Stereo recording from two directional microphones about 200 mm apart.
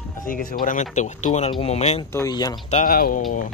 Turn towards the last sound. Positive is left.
turn(degrees=45)  # may be behind; listen again after turning